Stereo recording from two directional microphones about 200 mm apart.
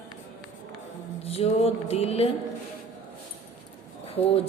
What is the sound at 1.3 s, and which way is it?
A woman's voice, 30° left (ahead or behind).